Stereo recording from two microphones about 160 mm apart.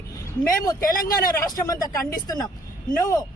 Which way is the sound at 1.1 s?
20° left (ahead or behind).